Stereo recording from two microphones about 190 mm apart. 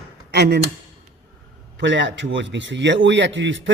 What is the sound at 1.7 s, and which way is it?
A man's voice, 70° right (ahead or behind).